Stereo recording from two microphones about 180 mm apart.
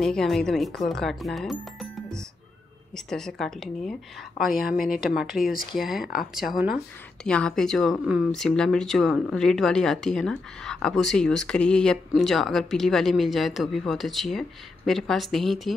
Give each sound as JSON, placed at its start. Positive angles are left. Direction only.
{"t": 0.0, "sound": "speech", "side_deg": 0}
{"t": 7.2, "sound": "speech", "side_deg": 5}